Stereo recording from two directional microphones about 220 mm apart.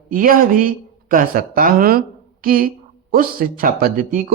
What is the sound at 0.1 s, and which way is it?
A woman's voice, 40° right (ahead or behind).